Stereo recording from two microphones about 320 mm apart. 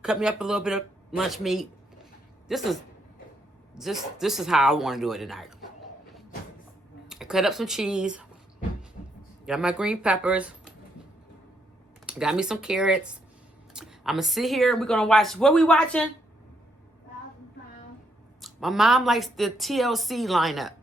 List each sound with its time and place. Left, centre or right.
0.0 s a woman's voice: centre
3.8 s a woman's voice: centre
7.1 s a woman's voice: centre
9.5 s a woman's voice: centre
12.0 s a woman's voice: centre
18.4 s a woman's voice: centre